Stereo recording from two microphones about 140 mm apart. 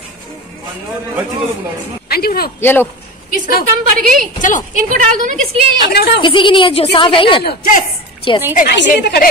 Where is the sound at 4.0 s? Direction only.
80° right.